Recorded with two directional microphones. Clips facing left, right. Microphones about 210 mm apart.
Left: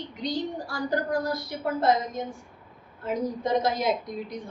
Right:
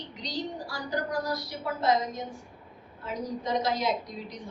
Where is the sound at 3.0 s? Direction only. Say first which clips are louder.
Left 5 dB; 55° left (ahead or behind).